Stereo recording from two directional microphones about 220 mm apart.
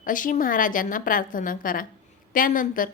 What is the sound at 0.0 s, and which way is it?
A woman's voice, 35° left (ahead or behind).